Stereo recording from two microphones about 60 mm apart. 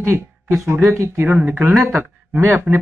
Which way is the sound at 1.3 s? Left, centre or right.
Right.